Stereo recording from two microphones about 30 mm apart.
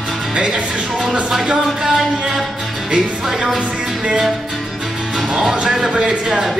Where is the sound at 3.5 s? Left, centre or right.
Right.